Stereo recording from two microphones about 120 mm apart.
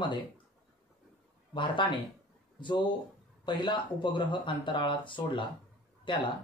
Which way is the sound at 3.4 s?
40° left (ahead or behind).